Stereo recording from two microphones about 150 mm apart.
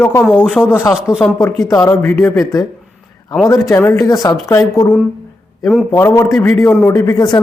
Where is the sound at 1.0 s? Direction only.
5° right (ahead or behind).